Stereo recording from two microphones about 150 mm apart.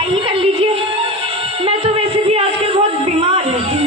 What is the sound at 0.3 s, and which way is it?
Music, 40° right (ahead or behind).